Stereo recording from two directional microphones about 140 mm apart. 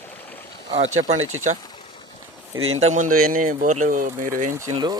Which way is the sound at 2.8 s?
60° right (ahead or behind).